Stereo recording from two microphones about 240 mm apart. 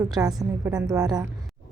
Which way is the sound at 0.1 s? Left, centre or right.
Centre.